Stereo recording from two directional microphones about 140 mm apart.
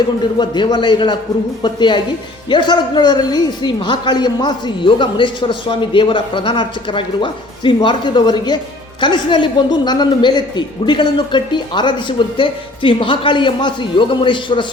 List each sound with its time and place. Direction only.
0.3 s a woman's voice: 30° left (ahead or behind)